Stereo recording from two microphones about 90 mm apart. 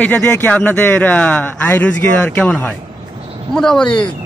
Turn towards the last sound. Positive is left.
turn(degrees=10)  # may be behind; listen again after turning